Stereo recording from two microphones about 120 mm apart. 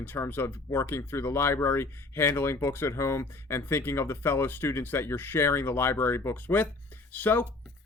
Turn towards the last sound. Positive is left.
turn(degrees=15)  # may be behind; listen again after turning